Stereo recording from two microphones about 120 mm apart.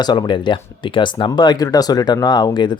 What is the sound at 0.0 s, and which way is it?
Speech, 35° left (ahead or behind).